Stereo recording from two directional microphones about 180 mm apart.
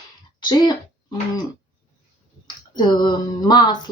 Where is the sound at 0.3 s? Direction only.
25° left (ahead or behind).